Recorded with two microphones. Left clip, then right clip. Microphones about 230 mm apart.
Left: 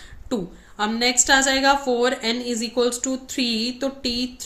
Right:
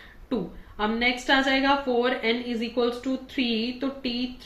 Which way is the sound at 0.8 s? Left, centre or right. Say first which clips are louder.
Left 4 dB; left.